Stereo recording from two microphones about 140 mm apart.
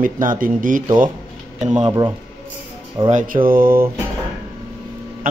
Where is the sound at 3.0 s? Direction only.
70° right (ahead or behind); by 3.8 s 90° right.